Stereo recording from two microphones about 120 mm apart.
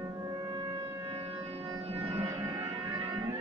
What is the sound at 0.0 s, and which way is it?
Wind instrument, 30° right (ahead or behind).